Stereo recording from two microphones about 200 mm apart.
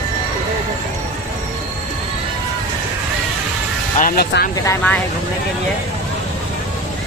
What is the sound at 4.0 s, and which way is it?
Speech, 45° left (ahead or behind).